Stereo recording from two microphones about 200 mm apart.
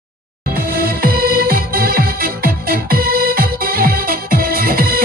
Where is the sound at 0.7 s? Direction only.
50° right (ahead or behind).